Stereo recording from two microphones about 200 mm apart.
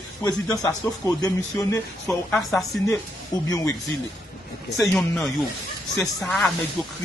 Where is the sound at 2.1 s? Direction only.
Centre (ahead or behind).